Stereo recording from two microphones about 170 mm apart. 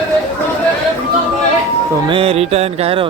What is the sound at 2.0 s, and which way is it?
Music, 35° right (ahead or behind).